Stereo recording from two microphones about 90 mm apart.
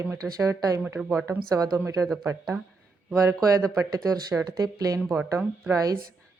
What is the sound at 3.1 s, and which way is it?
Speech, 35° right (ahead or behind).